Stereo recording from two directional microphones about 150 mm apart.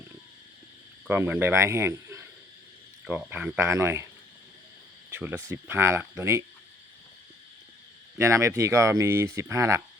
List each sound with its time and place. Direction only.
1.0 s speech: 10° right (ahead or behind)
5.1 s speech: 15° right (ahead or behind)
8.2 s speech: 20° right (ahead or behind)